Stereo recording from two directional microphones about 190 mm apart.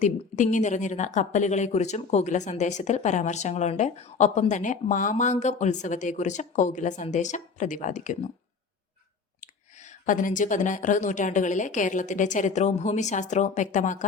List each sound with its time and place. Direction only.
0.0 s a woman's voice: 40° left (ahead or behind)
9.4 s a woman's voice: 40° left (ahead or behind)